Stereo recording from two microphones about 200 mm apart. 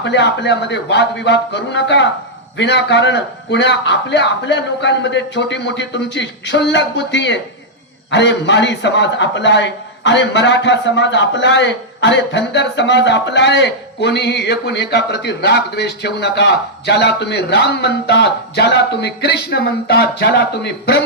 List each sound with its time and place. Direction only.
0.0 s a man's voice: 60° left (ahead or behind)